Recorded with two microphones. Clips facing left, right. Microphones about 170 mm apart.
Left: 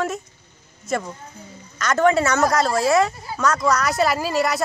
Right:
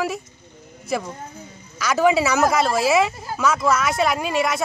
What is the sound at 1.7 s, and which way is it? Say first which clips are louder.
Speech: even; 5° right (ahead or behind).